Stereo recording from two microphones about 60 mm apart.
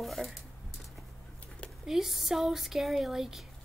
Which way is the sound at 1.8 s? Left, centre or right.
Centre.